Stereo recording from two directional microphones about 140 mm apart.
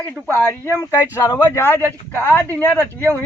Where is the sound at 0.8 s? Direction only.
20° left (ahead or behind).